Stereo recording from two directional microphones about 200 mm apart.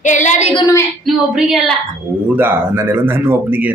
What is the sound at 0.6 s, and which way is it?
Speech, 15° left (ahead or behind).